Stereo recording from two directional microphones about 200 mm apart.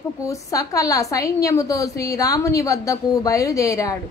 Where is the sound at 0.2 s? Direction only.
15° left (ahead or behind).